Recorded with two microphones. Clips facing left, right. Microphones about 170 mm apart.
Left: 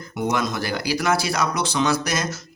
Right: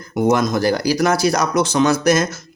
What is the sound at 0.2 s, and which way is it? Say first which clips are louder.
Speech: right 8 dB; 45° right (ahead or behind).